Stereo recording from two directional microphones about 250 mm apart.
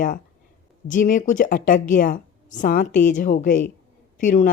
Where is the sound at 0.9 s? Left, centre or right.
Left.